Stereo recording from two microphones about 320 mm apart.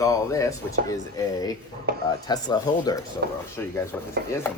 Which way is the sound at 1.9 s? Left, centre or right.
Right.